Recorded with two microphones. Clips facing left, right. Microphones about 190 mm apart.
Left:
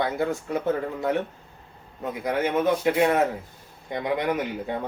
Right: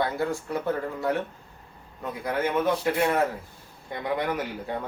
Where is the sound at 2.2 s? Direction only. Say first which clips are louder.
Left 2 dB; 20° left (ahead or behind).